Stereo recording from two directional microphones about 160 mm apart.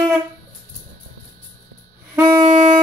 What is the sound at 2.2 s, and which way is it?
Music, 25° right (ahead or behind).